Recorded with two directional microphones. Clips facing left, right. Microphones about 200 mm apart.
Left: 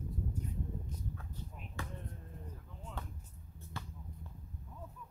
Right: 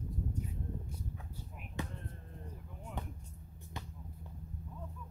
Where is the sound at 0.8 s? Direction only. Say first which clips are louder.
Left 1 dB; 10° right (ahead or behind).